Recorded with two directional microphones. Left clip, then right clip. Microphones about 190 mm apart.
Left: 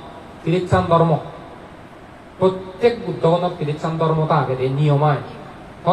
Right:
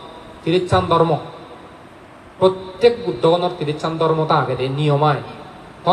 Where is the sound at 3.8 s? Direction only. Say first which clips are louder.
Right 2 dB; 40° right (ahead or behind).